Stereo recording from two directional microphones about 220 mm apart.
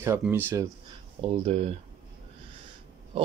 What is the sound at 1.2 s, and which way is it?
Speech, 25° right (ahead or behind).